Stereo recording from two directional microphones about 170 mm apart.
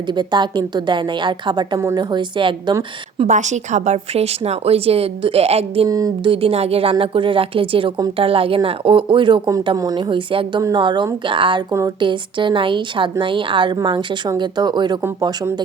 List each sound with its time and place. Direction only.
0.1 s a woman's voice: 25° right (ahead or behind)
3.2 s speech: 45° right (ahead or behind)
5.9 s a woman's voice: 20° right (ahead or behind)
6.3 s a woman's voice: 35° right (ahead or behind)